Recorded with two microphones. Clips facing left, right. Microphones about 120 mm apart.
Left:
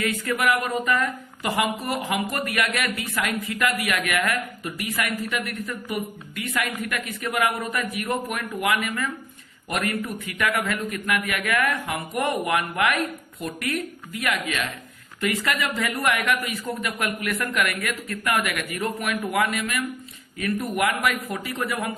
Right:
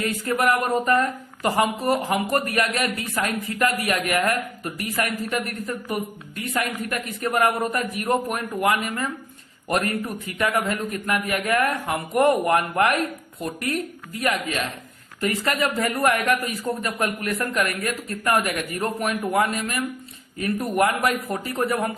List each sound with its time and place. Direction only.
0.0 s speech: 40° right (ahead or behind)